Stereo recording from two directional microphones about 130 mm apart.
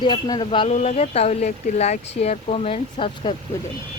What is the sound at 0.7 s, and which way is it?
Speech, 60° left (ahead or behind).